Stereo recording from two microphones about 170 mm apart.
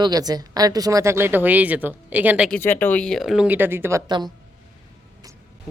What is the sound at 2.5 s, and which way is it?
A man's voice, 10° left (ahead or behind).